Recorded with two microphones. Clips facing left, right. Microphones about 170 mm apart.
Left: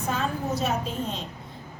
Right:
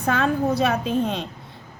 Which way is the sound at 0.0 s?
60° right (ahead or behind).